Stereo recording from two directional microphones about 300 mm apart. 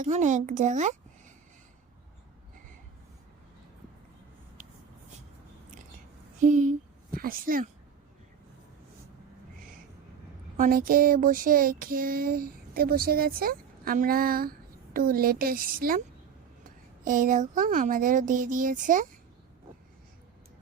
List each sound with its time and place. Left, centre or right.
0.0 s a woman's voice: right
6.4 s a child's voice: right
10.6 s a sound: right